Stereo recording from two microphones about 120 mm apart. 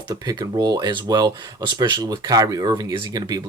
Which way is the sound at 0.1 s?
30° right (ahead or behind).